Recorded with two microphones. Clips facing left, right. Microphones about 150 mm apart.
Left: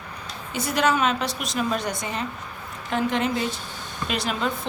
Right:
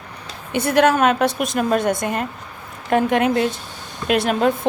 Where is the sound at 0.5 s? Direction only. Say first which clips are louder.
Right 7 dB; 60° right (ahead or behind).